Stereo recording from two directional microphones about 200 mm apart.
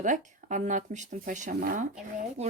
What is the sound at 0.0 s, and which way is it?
Speech, 40° right (ahead or behind).